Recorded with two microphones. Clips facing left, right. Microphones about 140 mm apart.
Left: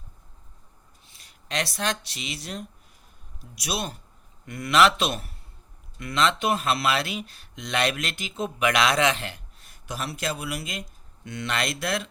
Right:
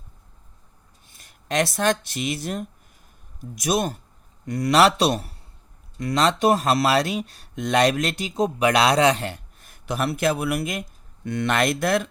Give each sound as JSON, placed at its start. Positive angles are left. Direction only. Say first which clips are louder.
{"t": 1.0, "sound": "speech", "louder": "right 9 dB", "side_deg": -50}